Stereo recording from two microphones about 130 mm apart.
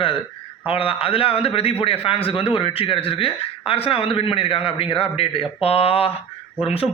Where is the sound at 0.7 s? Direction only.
45° left (ahead or behind).